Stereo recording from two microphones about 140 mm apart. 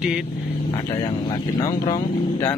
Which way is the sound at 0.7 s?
30° left (ahead or behind).